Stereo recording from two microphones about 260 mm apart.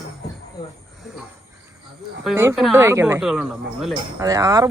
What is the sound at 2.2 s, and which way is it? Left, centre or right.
A man's voice, centre.